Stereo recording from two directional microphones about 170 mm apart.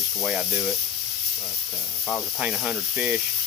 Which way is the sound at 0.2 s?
Centre (ahead or behind).